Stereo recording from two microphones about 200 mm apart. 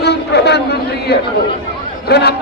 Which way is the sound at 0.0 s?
55° left (ahead or behind).